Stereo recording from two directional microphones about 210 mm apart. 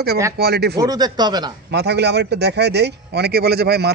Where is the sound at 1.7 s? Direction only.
50° right (ahead or behind).